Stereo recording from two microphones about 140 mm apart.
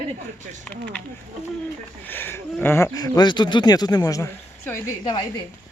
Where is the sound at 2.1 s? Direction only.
15° left (ahead or behind).